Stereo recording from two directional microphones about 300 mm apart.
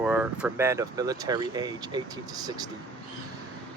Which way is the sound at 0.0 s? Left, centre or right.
Centre.